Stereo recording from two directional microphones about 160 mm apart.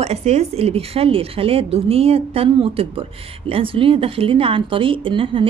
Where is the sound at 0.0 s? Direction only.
40° right (ahead or behind).